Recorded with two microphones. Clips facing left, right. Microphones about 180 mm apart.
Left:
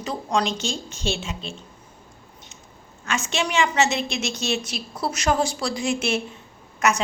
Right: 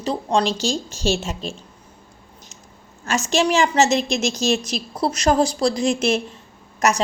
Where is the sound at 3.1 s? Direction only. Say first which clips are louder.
Right 7 dB; 40° right (ahead or behind).